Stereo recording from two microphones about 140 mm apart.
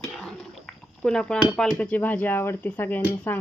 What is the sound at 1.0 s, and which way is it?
Speech, 5° left (ahead or behind).